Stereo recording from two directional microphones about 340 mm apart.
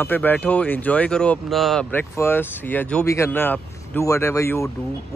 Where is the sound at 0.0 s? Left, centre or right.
Centre.